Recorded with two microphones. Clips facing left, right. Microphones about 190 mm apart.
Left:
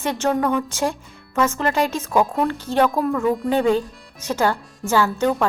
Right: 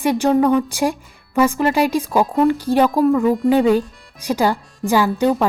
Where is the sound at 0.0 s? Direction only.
15° right (ahead or behind).